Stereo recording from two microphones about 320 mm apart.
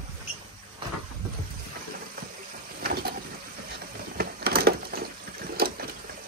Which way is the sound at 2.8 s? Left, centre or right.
Right.